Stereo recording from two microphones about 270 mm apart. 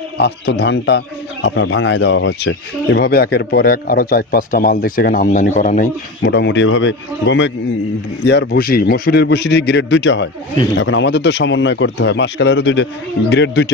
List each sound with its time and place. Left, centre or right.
0.2 s speech: left